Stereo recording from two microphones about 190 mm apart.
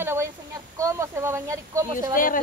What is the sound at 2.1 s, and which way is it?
Speech, 45° left (ahead or behind).